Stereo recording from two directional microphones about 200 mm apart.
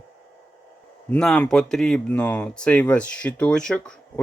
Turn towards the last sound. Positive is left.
turn(degrees=5)  # may be behind; listen again after turning